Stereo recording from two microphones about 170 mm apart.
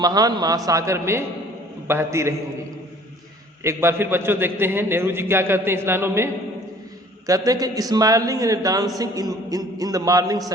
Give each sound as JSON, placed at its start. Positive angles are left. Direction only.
{"t": 0.0, "sound": "a man's voice", "side_deg": -25}
{"t": 3.6, "sound": "a man's voice", "side_deg": -15}